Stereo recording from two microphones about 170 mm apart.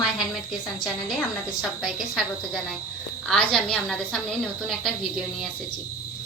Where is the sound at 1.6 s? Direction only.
Centre (ahead or behind).